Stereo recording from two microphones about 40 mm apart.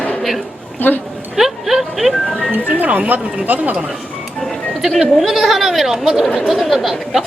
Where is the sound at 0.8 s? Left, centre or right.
Left.